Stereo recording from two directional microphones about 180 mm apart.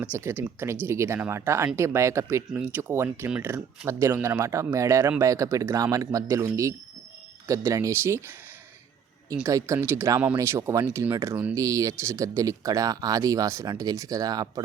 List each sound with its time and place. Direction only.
0.0 s speech: 15° right (ahead or behind)